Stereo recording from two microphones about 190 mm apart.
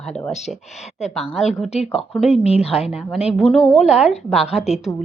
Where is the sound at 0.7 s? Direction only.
35° left (ahead or behind).